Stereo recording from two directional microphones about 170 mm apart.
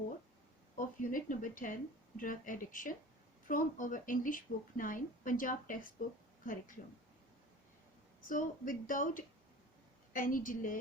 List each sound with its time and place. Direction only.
0.8 s a woman's voice: 50° left (ahead or behind)
8.2 s a woman's voice: 50° left (ahead or behind)